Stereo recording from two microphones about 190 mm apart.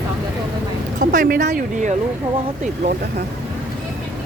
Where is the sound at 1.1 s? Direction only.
45° right (ahead or behind).